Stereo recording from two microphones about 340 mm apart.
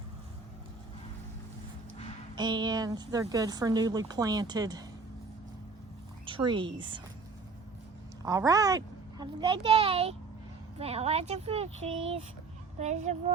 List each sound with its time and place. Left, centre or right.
2.3 s a woman's voice: centre
6.2 s speech: centre
8.2 s a child's voice: centre